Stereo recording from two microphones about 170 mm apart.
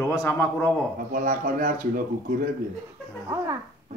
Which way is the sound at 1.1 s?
55° right (ahead or behind).